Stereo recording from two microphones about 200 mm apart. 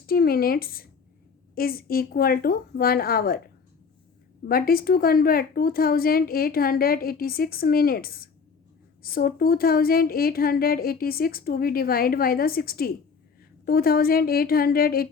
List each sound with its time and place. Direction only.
0.1 s speech: 50° left (ahead or behind)
4.4 s speech: 45° left (ahead or behind)